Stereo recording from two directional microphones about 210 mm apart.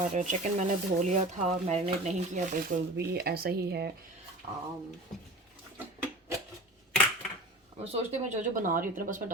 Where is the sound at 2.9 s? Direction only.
50° right (ahead or behind).